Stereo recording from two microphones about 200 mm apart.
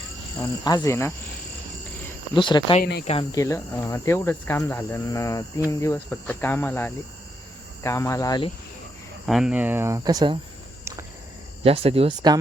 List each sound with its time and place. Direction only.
0.6 s speech: 20° left (ahead or behind)
2.3 s speech: 20° left (ahead or behind)
9.2 s speech: centre (ahead or behind); by 10.3 s 20° right (ahead or behind)
11.6 s speech: 30° right (ahead or behind)